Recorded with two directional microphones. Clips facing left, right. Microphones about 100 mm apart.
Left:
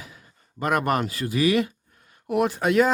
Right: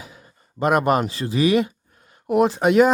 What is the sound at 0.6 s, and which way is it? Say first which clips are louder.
Speech: right 5 dB; 20° right (ahead or behind).